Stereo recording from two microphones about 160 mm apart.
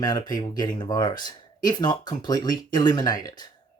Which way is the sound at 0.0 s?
25° left (ahead or behind).